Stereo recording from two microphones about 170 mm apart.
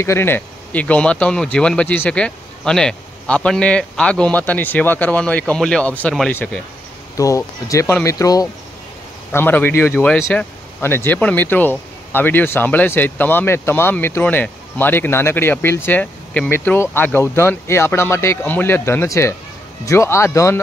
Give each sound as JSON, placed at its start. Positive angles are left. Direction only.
{"t": 0.0, "sound": "speech", "side_deg": 15}
{"t": 7.2, "sound": "speech", "side_deg": 20}